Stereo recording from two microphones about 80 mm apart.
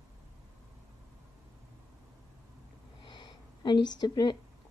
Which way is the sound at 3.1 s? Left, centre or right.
Left.